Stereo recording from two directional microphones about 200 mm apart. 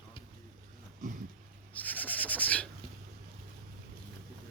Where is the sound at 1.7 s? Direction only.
10° left (ahead or behind).